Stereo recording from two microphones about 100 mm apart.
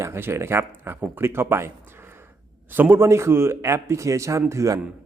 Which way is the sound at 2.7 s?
20° right (ahead or behind).